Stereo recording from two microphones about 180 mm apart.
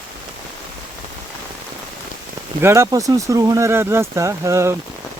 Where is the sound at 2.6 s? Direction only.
15° right (ahead or behind).